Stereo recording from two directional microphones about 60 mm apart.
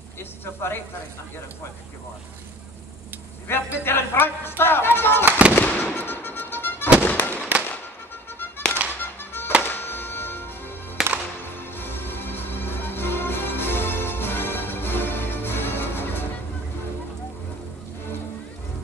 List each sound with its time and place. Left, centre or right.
0.2 s a sound: left
3.4 s speech: left
5.5 s fireworks: left
5.9 s music: left
7.0 s fireworks: left
9.0 s music: left
11.0 s music: centre
11.5 s music: left